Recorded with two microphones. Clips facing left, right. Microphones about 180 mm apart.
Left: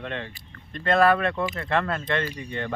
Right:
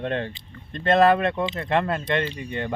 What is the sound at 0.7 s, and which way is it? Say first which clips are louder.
Speech: right 2 dB; 25° right (ahead or behind).